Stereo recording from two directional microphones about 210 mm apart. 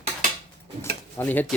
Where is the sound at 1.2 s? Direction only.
10° left (ahead or behind).